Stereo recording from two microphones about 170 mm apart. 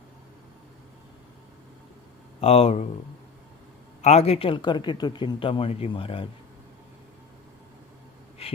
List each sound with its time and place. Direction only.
2.4 s speech: 35° left (ahead or behind)
4.0 s speech: 40° left (ahead or behind)
8.4 s a sound: 35° left (ahead or behind)